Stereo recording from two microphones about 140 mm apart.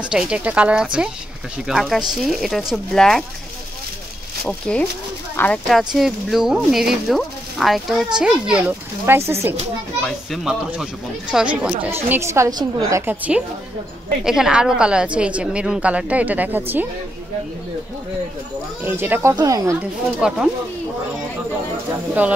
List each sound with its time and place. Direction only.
0.0 s a woman's voice: 5° right (ahead or behind)
4.5 s speech: 5° left (ahead or behind)
5.7 s a woman's voice: centre (ahead or behind)
10.0 s a woman's voice: centre (ahead or behind); by 13.0 s 30° right (ahead or behind)
13.0 s a woman's voice: 10° right (ahead or behind)
18.9 s a woman's voice: 15° right (ahead or behind)
19.8 s speech: 5° right (ahead or behind)